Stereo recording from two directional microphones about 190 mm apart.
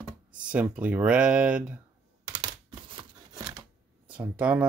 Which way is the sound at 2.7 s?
25° right (ahead or behind).